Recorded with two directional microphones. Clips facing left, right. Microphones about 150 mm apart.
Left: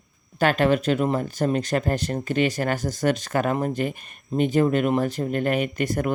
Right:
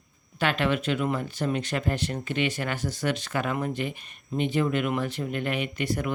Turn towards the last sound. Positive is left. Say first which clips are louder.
# left 4 dB
turn(degrees=45)  # may be behind; listen again after turning